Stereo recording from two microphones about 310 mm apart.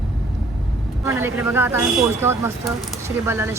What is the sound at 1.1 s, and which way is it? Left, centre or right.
Speech, centre.